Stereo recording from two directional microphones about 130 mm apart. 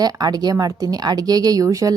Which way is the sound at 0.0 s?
30° right (ahead or behind).